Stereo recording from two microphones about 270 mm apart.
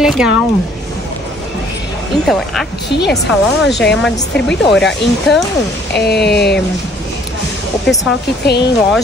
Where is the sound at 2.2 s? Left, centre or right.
Centre.